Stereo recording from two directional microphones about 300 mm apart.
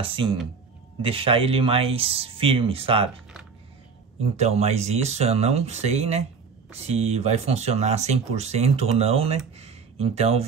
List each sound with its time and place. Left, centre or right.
0.0 s speech: centre
4.2 s speech: right